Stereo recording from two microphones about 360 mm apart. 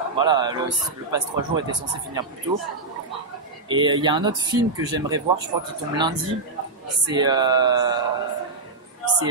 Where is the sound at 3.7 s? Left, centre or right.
Centre.